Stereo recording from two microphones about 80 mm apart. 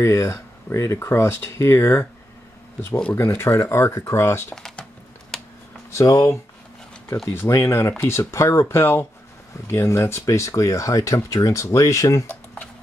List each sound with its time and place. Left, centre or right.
0.0 s speech: left
2.9 s speech: centre
3.2 s speech: left
5.3 s computer keyboard: centre
5.9 s speech: left
7.3 s speech: left